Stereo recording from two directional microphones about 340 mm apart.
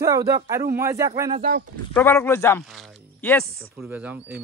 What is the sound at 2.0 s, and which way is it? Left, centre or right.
Speech, centre.